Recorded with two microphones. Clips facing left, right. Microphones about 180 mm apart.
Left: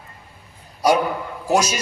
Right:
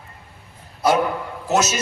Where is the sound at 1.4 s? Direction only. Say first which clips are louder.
Left 1 dB; 15° left (ahead or behind).